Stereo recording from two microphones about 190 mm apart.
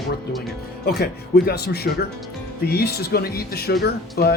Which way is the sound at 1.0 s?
55° left (ahead or behind).